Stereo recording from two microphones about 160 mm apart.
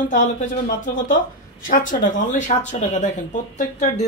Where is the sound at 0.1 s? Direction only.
50° left (ahead or behind).